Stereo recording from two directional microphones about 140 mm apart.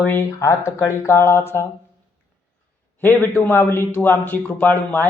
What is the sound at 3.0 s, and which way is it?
Speech, 15° left (ahead or behind).